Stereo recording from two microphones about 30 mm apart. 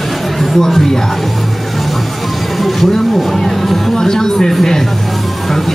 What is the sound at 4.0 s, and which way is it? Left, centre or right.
Speech, centre.